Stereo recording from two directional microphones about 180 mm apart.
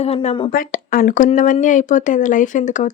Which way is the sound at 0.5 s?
50° left (ahead or behind).